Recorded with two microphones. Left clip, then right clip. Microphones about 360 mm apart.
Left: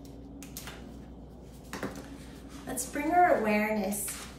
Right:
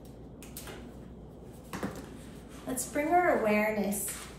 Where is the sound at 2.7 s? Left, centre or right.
Centre.